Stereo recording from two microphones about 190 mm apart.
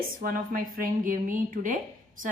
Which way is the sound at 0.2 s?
45° right (ahead or behind).